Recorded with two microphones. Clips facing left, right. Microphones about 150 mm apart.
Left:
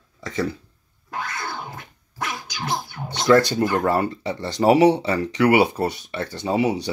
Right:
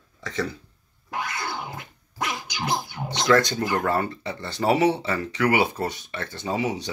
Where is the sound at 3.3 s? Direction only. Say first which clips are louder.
Left 5 dB; 10° left (ahead or behind).